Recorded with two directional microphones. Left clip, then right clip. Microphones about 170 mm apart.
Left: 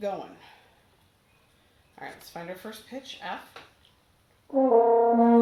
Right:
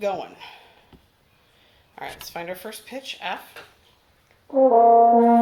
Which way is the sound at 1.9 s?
15° right (ahead or behind).